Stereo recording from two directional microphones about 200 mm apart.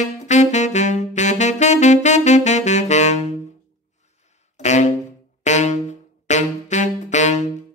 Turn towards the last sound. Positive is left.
turn(degrees=35)  # may be behind; listen again after turning